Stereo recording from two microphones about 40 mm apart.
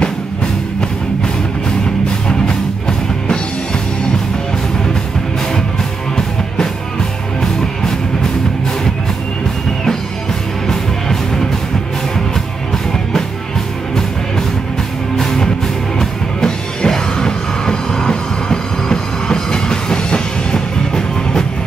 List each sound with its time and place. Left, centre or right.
10.7 s music: centre
15.1 s music: centre